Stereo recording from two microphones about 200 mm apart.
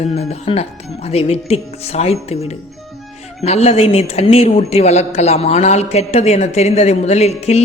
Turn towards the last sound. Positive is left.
turn(degrees=30)  # may be behind; listen again after turning